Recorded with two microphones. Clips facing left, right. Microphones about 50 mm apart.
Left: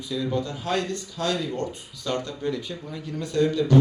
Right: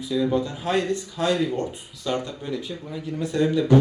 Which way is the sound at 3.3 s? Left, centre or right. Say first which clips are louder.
Right 1 dB; right.